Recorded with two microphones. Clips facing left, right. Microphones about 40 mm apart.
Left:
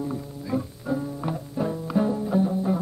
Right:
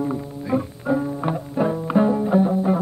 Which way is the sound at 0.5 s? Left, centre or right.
Right.